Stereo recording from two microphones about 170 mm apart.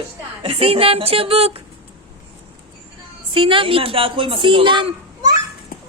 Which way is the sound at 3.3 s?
30° right (ahead or behind).